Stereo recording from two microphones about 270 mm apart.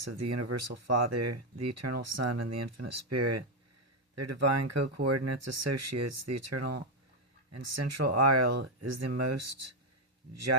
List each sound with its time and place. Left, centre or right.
0.0 s speech: right